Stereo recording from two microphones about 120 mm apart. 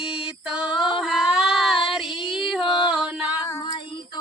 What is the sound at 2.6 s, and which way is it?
Music, 40° left (ahead or behind).